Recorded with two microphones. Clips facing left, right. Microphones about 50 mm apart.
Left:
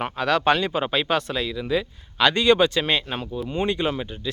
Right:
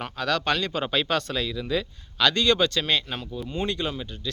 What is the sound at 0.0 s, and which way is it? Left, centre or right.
A man's voice, centre.